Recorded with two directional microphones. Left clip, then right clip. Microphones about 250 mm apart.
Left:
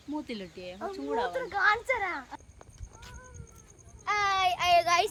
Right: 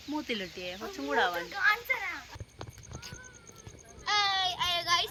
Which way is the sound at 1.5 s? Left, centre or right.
Left.